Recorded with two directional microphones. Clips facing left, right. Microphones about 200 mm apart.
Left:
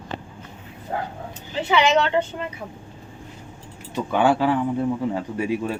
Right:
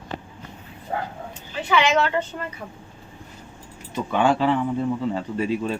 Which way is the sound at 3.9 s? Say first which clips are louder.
Left 1 dB; 15° left (ahead or behind).